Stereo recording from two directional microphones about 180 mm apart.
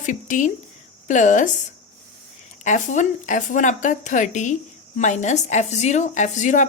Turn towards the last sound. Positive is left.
turn(degrees=45)  # may be behind; listen again after turning